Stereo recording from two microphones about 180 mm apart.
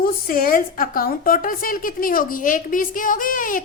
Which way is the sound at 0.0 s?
50° left (ahead or behind).